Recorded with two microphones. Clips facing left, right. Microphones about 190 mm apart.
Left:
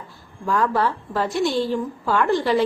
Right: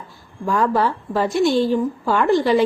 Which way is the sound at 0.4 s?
15° right (ahead or behind).